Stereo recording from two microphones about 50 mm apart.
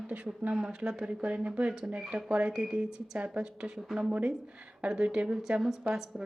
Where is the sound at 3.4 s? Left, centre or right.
Centre.